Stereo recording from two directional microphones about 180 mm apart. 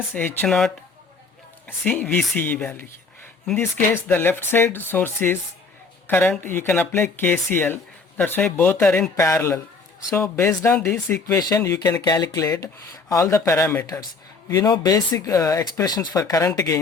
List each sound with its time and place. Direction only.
0.1 s speech: 10° left (ahead or behind)